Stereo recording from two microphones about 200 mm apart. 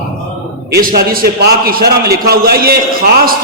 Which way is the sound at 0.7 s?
50° right (ahead or behind).